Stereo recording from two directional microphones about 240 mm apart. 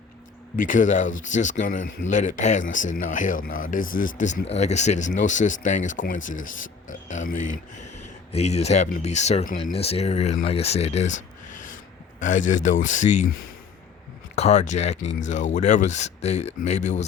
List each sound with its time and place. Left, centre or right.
0.5 s speech: left
12.2 s speech: left
14.3 s speech: left